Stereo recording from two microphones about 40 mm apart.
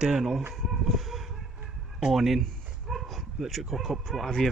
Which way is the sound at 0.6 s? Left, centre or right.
Centre.